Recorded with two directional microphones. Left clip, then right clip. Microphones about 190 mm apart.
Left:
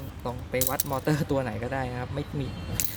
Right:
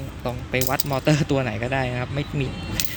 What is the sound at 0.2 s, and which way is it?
Speech, 15° left (ahead or behind).